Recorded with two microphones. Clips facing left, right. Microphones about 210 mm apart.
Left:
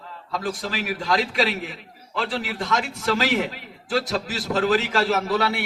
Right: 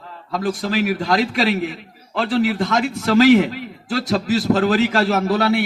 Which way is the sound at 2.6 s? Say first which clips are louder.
Right 5 dB; 45° right (ahead or behind).